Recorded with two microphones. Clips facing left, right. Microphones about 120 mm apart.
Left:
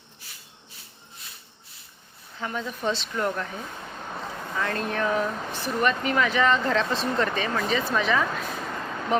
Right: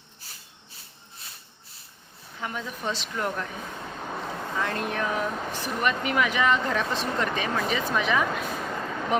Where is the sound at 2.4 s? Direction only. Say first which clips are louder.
Left 3 dB; 5° right (ahead or behind).